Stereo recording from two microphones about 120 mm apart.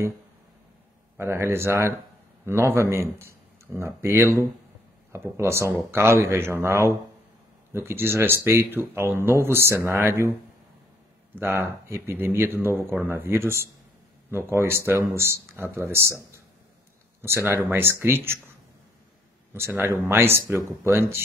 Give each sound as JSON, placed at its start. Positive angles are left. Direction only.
{"t": 1.1, "sound": "speech", "side_deg": -20}
{"t": 11.3, "sound": "speech", "side_deg": -20}
{"t": 19.8, "sound": "speech", "side_deg": -20}